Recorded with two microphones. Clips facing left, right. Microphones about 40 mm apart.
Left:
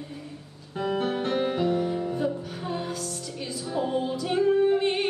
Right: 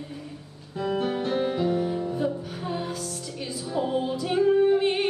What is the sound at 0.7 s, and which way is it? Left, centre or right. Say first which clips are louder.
Music: even; left.